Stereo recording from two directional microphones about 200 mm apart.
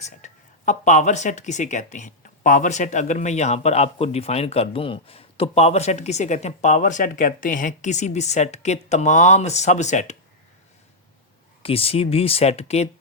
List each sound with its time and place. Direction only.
0.2 s speech: 35° left (ahead or behind)
11.6 s speech: 30° left (ahead or behind)